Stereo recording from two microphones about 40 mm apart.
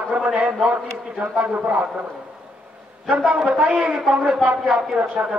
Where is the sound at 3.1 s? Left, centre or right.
Right.